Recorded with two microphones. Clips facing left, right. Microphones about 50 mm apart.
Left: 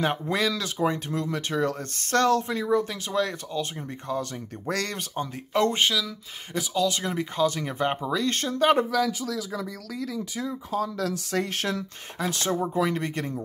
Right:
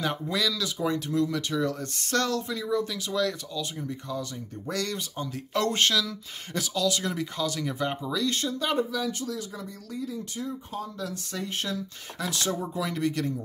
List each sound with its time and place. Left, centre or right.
0.0 s speech: left
4.2 s speech: left
5.1 s speech: left
5.5 s speech: left
5.8 s speech: centre
6.8 s speech: left
8.9 s speech: left
11.0 s speech: left
12.2 s speech: left